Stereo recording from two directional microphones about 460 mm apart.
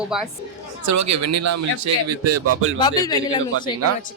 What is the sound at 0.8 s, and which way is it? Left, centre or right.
Speech, right.